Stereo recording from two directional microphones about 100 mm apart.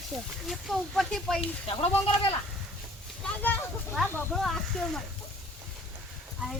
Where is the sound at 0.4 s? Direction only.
Centre (ahead or behind).